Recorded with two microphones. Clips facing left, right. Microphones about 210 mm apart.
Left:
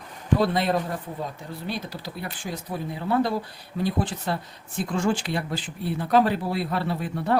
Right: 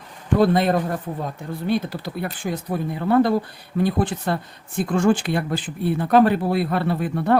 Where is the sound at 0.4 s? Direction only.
50° right (ahead or behind).